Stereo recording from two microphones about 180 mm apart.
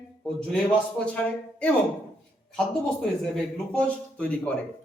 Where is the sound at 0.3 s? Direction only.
5° left (ahead or behind).